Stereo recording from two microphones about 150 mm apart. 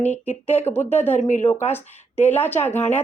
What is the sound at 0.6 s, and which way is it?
Speech, 15° left (ahead or behind).